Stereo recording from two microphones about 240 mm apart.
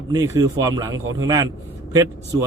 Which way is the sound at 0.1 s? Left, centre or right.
Centre.